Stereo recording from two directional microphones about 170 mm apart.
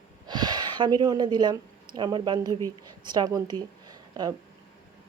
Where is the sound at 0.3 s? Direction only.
25° right (ahead or behind).